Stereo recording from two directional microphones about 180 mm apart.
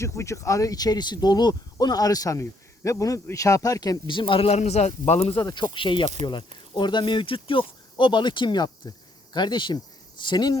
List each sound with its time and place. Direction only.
0.0 s speech: 15° left (ahead or behind); by 5.4 s 35° left (ahead or behind)
5.4 s speech: 20° left (ahead or behind)